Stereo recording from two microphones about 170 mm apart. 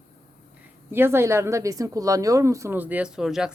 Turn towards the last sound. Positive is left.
turn(degrees=-5)  # may be behind; listen again after turning